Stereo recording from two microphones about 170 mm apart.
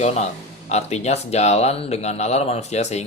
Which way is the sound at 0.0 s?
40° left (ahead or behind).